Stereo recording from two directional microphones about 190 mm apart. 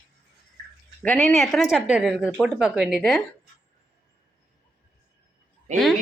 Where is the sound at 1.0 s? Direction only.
5° left (ahead or behind).